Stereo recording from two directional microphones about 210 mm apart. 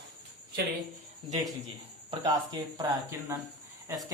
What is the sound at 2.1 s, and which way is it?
Speech, 20° right (ahead or behind).